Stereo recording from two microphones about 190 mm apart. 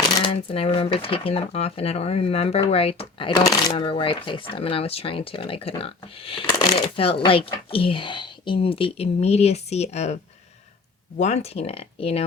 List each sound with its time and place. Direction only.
0.3 s speech: 30° left (ahead or behind)
11.2 s speech: 35° left (ahead or behind)